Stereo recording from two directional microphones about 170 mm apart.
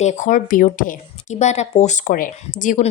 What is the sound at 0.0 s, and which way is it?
Speech, 45° left (ahead or behind).